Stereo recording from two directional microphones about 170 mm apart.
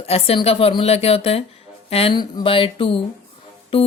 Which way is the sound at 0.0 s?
35° left (ahead or behind).